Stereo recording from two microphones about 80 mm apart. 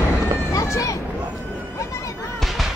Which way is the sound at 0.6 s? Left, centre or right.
Left.